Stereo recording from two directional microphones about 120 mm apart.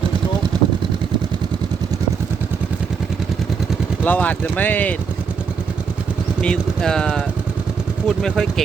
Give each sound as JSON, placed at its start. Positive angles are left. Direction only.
{"t": 0.5, "sound": "vehicle", "side_deg": -40}
{"t": 4.0, "sound": "speech", "side_deg": 15}
{"t": 6.4, "sound": "speech", "side_deg": 5}